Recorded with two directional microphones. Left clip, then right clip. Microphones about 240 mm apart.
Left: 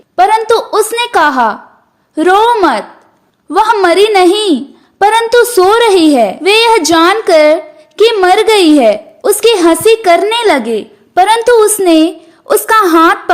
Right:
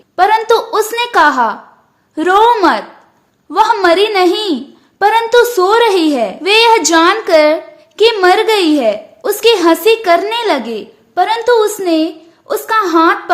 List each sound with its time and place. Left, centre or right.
0.2 s a sound: centre
2.1 s a woman's voice: centre
3.5 s a woman's voice: left